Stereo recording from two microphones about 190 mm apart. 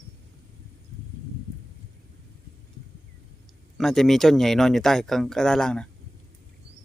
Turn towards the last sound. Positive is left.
turn(degrees=5)  # may be behind; listen again after turning